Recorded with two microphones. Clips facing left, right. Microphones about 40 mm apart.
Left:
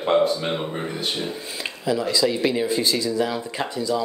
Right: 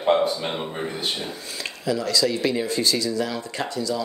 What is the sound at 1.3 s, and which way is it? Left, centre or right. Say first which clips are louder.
Speech: left 2 dB; centre.